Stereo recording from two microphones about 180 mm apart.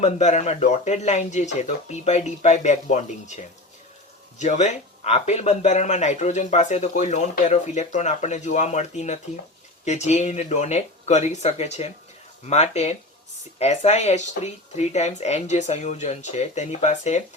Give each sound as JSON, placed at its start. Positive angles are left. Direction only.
{"t": 0.0, "sound": "speech", "side_deg": 40}